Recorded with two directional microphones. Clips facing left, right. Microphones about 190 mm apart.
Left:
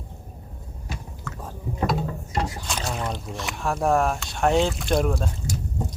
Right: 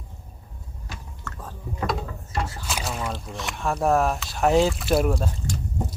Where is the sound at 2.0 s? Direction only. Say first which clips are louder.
Left 3 dB; 20° left (ahead or behind).